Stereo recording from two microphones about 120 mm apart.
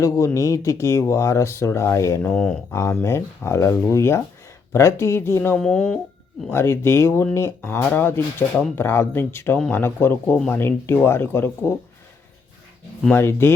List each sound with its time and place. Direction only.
0.3 s speech: 25° left (ahead or behind)
2.3 s speech: 5° left (ahead or behind)
2.7 s speech: 25° left (ahead or behind)
5.5 s speech: 5° left (ahead or behind)
6.5 s speech: 20° left (ahead or behind)
13.1 s speech: 20° left (ahead or behind)